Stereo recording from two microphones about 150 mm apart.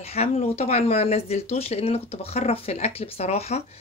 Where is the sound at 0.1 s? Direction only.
45° left (ahead or behind).